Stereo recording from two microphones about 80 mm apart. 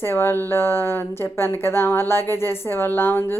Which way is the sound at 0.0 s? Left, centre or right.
Left.